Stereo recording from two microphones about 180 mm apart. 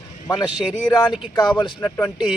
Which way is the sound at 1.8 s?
10° left (ahead or behind).